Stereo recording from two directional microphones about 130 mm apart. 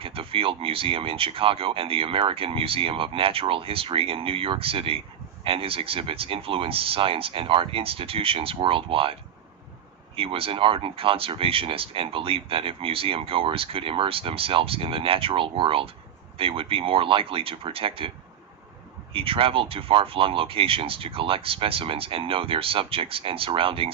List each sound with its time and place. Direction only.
0.0 s speech: 45° right (ahead or behind)
10.2 s speech: 45° right (ahead or behind)
19.1 s speech: 45° right (ahead or behind)